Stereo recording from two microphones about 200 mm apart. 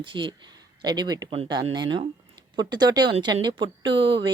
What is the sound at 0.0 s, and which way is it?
A woman's voice, 25° right (ahead or behind).